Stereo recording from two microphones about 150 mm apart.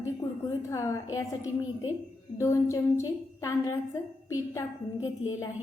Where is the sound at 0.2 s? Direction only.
25° left (ahead or behind).